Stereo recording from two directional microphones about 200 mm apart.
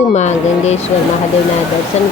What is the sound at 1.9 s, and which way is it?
Speech, 35° left (ahead or behind).